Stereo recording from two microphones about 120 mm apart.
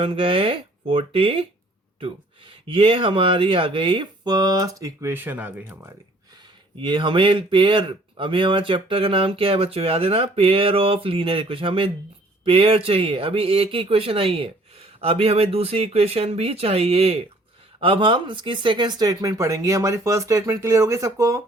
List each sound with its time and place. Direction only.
0.0 s speech: 50° right (ahead or behind)
2.6 s speech: 50° right (ahead or behind); by 5.9 s 15° right (ahead or behind)
6.7 s speech: 45° right (ahead or behind); by 21.4 s 25° right (ahead or behind)